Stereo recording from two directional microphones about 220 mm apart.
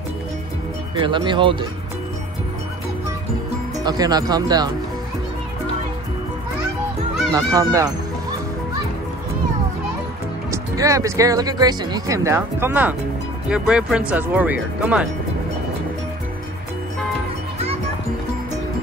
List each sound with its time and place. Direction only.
1.0 s speech: 20° right (ahead or behind)
3.8 s speech: 15° right (ahead or behind)
7.3 s speech: 15° right (ahead or behind)
10.5 s speech: 15° right (ahead or behind)